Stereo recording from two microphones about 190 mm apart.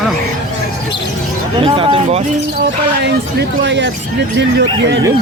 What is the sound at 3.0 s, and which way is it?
Speech, 65° right (ahead or behind).